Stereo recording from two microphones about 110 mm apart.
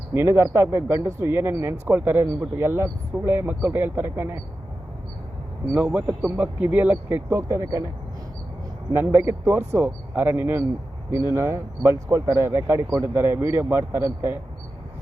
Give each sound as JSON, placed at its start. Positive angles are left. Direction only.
{"t": 0.1, "sound": "speech", "side_deg": -25}
{"t": 5.7, "sound": "speech", "side_deg": -15}
{"t": 8.9, "sound": "speech", "side_deg": -20}